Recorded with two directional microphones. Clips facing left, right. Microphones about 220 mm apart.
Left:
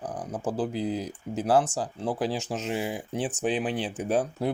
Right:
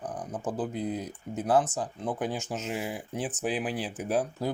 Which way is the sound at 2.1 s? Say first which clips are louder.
Left 3 dB; 90° left.